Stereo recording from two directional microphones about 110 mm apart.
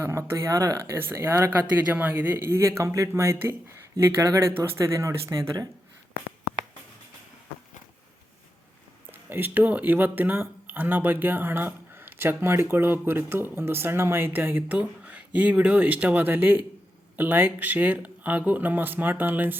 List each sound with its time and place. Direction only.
0.0 s speech: 25° right (ahead or behind)
4.5 s speech: 20° right (ahead or behind)
9.1 s speech: 15° right (ahead or behind)